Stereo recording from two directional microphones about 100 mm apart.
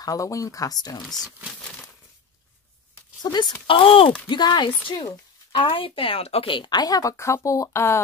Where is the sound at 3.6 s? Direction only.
60° left (ahead or behind).